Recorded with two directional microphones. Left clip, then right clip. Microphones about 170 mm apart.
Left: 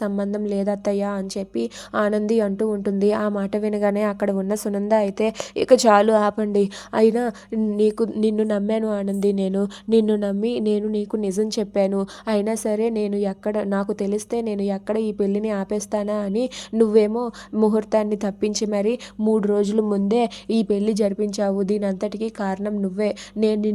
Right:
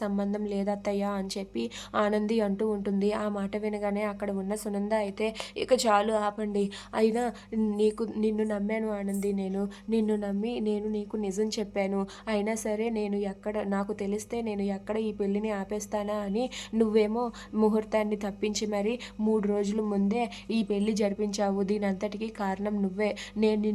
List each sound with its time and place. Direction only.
0.0 s a woman's voice: 30° left (ahead or behind)